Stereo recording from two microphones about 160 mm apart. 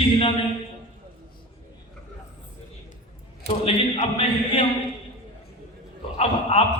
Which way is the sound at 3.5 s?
35° left (ahead or behind).